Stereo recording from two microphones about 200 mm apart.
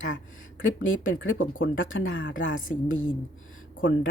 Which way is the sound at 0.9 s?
75° left (ahead or behind).